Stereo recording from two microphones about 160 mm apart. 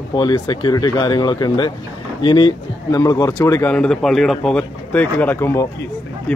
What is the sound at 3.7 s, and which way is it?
Speech, 5° left (ahead or behind).